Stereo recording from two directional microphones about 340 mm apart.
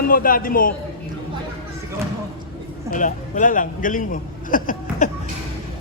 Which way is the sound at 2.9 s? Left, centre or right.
Left.